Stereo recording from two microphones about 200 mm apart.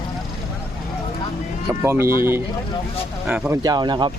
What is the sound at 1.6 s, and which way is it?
Speech, 15° right (ahead or behind).